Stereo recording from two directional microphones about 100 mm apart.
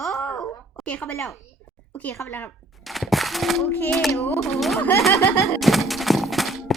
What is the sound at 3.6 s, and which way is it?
Speech, 25° left (ahead or behind).